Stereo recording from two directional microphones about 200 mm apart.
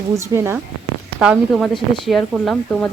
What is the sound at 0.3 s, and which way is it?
A woman's voice, 10° right (ahead or behind).